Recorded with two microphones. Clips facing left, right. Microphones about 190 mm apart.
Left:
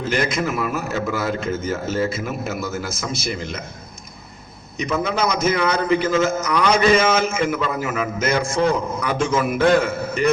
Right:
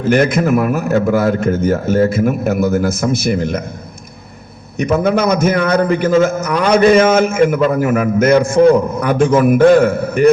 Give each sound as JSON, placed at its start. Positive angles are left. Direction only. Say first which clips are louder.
{"t": 0.0, "sound": "a man's voice", "louder": "right 9 dB", "side_deg": -55}
{"t": 4.8, "sound": "a man's voice", "louder": "right 8 dB", "side_deg": -55}